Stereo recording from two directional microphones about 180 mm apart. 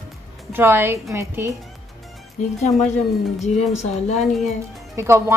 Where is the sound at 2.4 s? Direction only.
45° left (ahead or behind).